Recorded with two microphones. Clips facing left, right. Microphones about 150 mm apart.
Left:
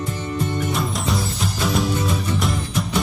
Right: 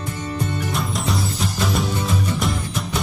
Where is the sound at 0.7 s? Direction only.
Centre (ahead or behind).